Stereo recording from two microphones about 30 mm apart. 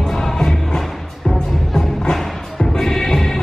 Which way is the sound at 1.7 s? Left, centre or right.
Centre.